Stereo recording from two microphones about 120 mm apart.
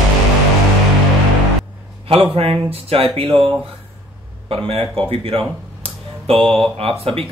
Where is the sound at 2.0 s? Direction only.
55° right (ahead or behind).